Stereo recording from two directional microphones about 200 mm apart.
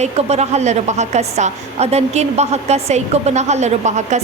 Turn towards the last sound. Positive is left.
turn(degrees=-35)  # may be behind; listen again after turning